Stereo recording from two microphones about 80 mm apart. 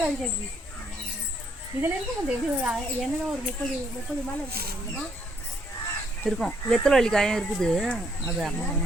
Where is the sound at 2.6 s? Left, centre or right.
Centre.